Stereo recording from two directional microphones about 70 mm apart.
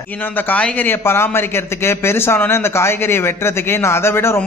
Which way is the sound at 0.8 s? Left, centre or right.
Left.